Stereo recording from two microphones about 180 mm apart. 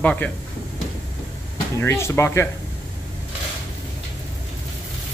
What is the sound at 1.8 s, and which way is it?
Speech, 15° left (ahead or behind).